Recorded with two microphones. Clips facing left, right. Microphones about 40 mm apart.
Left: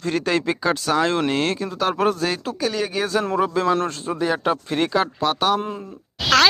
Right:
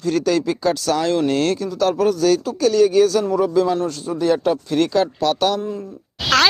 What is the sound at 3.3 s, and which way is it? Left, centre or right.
Speech, left.